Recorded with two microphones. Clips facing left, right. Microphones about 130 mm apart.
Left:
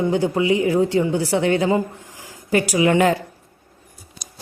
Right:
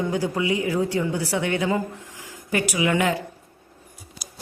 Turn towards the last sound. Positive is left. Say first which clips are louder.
# left 6 dB
turn(degrees=40)  # may be behind; listen again after turning